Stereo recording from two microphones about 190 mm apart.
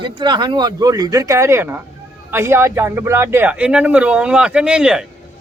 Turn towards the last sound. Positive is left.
turn(degrees=-5)  # may be behind; listen again after turning